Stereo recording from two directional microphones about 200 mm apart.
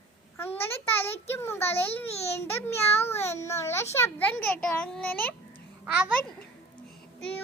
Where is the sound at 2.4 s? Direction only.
15° left (ahead or behind).